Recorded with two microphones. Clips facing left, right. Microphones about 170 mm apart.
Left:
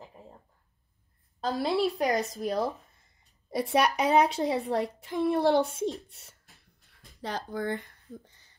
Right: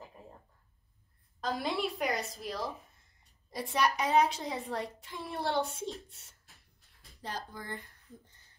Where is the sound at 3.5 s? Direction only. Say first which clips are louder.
Left 5 dB; 65° left (ahead or behind).